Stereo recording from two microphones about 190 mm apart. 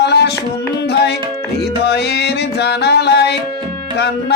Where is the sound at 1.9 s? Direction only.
60° left (ahead or behind).